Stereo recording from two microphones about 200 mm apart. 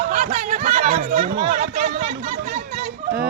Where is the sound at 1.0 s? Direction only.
50° right (ahead or behind).